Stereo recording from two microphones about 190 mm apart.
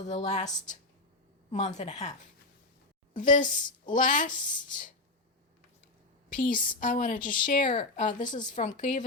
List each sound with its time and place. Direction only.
0.0 s a woman's voice: 35° left (ahead or behind)
6.3 s a woman's voice: 45° left (ahead or behind)